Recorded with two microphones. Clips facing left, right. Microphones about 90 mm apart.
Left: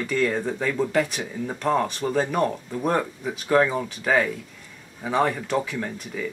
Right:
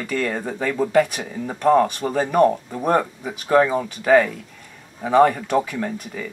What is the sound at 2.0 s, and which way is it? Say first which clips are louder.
Speech: right 1 dB; 35° right (ahead or behind).